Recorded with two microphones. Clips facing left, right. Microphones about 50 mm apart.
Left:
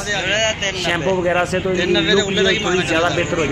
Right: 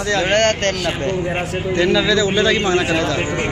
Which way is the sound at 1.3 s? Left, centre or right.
Left.